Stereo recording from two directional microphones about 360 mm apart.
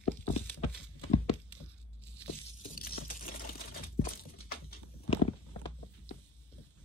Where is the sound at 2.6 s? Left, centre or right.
Left.